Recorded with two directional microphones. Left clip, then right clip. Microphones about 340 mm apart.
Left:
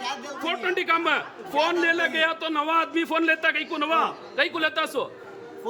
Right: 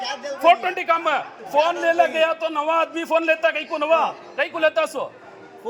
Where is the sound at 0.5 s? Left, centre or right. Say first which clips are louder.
Right 4 dB; centre.